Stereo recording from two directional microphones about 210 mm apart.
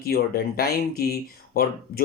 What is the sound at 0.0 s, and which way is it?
Speech, 45° left (ahead or behind).